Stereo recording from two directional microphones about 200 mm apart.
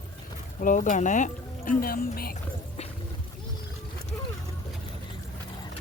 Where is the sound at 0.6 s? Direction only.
40° left (ahead or behind).